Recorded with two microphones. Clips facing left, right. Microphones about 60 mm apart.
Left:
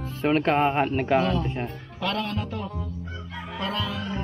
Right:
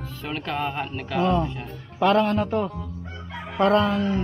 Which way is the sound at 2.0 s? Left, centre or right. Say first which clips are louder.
Right 9 dB; right.